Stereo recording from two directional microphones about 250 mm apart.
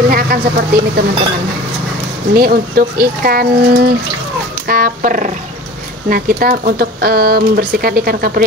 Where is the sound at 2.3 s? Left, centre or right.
Right.